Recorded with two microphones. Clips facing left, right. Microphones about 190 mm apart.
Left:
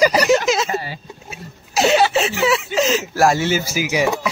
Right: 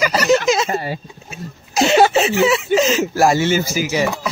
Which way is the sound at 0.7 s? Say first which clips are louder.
Right 3 dB; 50° right (ahead or behind).